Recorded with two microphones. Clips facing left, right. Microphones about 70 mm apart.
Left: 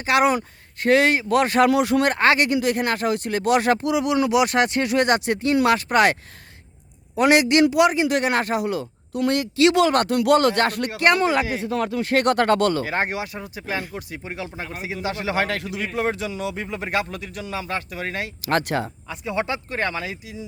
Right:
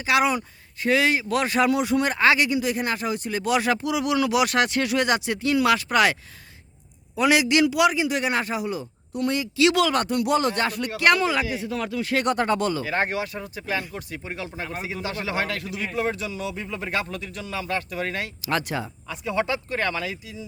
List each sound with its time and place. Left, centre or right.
0.0 s speech: left
1.7 s speech: left
3.9 s speech: left
7.2 s speech: left
8.0 s speech: left
9.6 s speech: left
9.9 s speech: left
10.9 s speech: left
12.2 s speech: left
13.1 s speech: centre; by 16.9 s left
16.9 s speech: centre
18.4 s speech: left
19.1 s speech: centre